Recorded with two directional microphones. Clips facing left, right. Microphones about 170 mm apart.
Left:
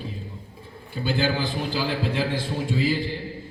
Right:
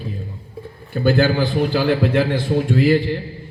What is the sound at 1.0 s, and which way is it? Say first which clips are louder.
A man's voice: right 8 dB; 60° right (ahead or behind).